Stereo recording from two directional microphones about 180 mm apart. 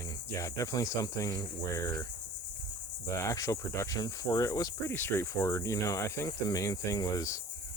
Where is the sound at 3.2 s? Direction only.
15° left (ahead or behind).